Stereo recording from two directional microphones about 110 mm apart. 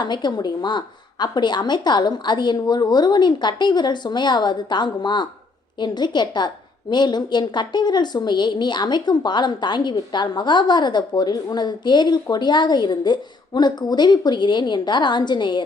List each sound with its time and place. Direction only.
0.0 s a woman's voice: 40° left (ahead or behind)